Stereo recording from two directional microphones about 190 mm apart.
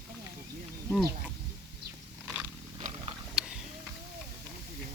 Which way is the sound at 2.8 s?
30° right (ahead or behind).